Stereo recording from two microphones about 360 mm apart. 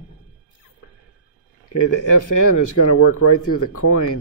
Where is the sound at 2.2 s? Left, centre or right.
Left.